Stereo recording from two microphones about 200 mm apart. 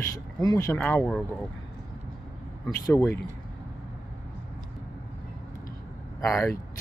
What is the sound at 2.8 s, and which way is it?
Speech, 15° left (ahead or behind).